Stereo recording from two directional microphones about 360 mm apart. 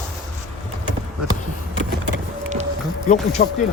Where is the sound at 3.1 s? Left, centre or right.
Centre.